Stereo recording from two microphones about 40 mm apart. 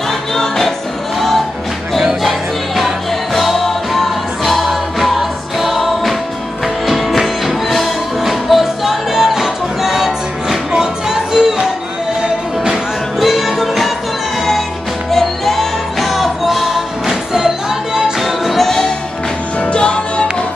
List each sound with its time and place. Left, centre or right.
0.3 s music: centre
2.2 s music: centre
13.2 s music: centre
15.0 s music: centre
18.2 s music: centre
19.6 s music: left